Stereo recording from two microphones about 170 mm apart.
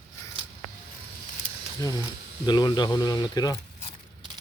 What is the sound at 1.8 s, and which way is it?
A man's voice, 20° left (ahead or behind).